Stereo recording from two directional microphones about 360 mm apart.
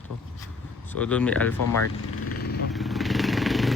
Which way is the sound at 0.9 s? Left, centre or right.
Centre.